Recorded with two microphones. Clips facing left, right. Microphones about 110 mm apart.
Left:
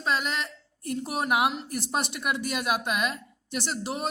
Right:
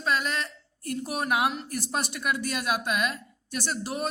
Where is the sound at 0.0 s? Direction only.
20° left (ahead or behind).